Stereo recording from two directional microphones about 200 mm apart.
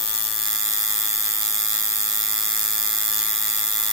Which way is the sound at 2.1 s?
Centre (ahead or behind).